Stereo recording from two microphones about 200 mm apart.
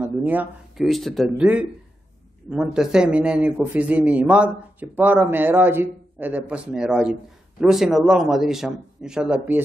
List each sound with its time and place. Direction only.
0.0 s a man's voice: 10° right (ahead or behind)